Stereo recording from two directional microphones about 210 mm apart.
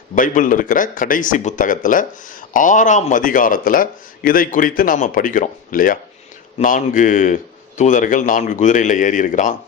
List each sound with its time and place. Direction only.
0.2 s speech: 40° left (ahead or behind)